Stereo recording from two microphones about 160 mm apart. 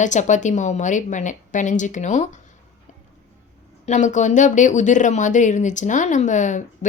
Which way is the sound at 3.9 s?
50° left (ahead or behind).